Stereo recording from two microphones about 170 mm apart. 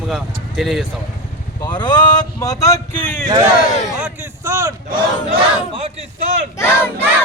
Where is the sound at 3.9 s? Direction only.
10° right (ahead or behind).